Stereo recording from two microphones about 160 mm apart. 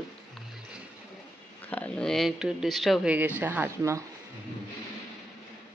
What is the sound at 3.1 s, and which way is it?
Speech, 10° right (ahead or behind).